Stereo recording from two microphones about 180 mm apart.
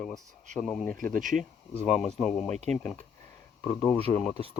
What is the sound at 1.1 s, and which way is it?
Speech, 45° right (ahead or behind).